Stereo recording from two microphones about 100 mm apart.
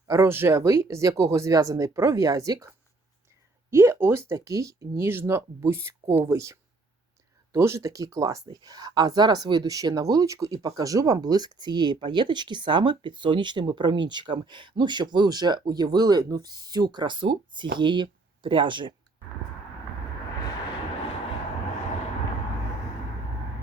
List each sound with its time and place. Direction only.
0.1 s speech: 25° right (ahead or behind)
3.7 s speech: 25° right (ahead or behind); by 18.9 s 50° right (ahead or behind)